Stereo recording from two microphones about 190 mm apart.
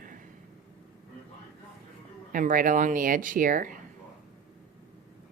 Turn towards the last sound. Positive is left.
turn(degrees=-45)  # may be behind; listen again after turning